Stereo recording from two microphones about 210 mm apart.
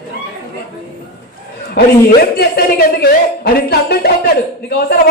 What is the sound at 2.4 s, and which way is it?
Speech, 50° left (ahead or behind).